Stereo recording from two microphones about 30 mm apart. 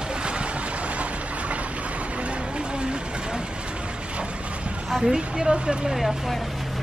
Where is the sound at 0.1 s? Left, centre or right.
Right.